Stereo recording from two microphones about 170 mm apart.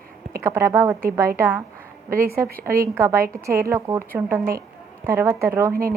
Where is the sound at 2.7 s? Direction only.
15° right (ahead or behind).